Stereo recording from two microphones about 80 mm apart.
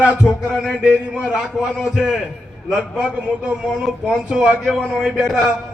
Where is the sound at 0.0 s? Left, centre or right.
Centre.